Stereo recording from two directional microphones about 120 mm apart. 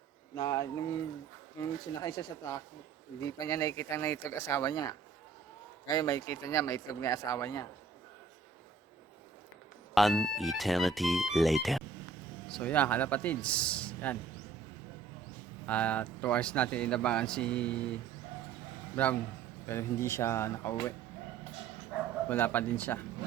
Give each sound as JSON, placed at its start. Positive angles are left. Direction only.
{"t": 0.3, "sound": "speech", "side_deg": 30}
{"t": 9.9, "sound": "speech", "side_deg": 0}
{"t": 15.6, "sound": "speech", "side_deg": 10}
{"t": 19.6, "sound": "speech", "side_deg": 20}
{"t": 22.3, "sound": "speech", "side_deg": 15}